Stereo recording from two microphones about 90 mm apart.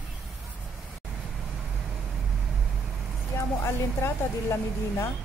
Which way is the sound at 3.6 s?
30° left (ahead or behind).